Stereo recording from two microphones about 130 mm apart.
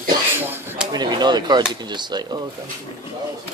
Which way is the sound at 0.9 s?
35° right (ahead or behind).